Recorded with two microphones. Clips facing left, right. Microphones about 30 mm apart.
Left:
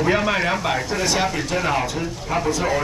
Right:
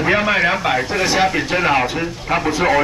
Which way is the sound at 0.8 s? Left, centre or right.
Right.